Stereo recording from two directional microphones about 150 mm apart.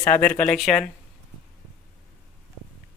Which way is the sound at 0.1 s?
10° left (ahead or behind).